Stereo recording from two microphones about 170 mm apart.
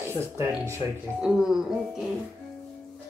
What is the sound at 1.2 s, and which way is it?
Speech, 5° right (ahead or behind).